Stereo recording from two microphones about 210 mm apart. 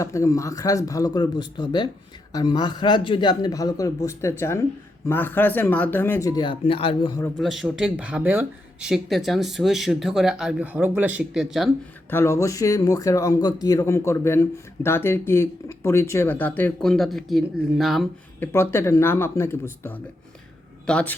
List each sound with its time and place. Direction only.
0.0 s a man's voice: 15° left (ahead or behind)
7.3 s speech: centre (ahead or behind)
12.1 s speech: 15° left (ahead or behind)
18.5 s speech: 10° left (ahead or behind)